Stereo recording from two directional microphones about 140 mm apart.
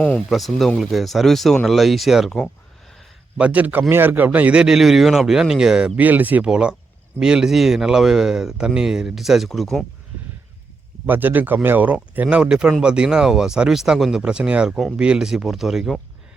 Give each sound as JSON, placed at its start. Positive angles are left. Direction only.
{"t": 0.3, "sound": "speech", "side_deg": 0}
{"t": 3.3, "sound": "speech", "side_deg": -10}
{"t": 11.0, "sound": "speech", "side_deg": -15}